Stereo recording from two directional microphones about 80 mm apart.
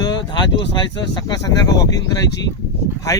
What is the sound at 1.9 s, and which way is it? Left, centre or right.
Speech, left.